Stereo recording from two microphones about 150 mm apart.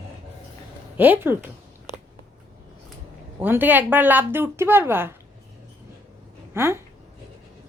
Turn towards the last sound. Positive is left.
turn(degrees=-20)  # may be behind; listen again after turning